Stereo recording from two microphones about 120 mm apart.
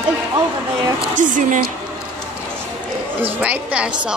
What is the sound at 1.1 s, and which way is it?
Speech, 90° right.